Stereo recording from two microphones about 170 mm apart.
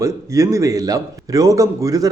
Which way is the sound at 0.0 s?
20° right (ahead or behind).